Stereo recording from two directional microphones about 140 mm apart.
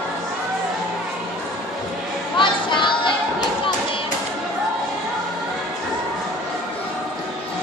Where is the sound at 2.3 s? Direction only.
35° left (ahead or behind).